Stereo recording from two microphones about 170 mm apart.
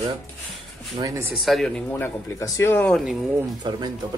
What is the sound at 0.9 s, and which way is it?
Speech, 20° right (ahead or behind).